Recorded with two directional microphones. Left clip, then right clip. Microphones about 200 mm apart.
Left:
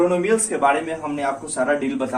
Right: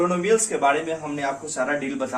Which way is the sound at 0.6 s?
20° right (ahead or behind).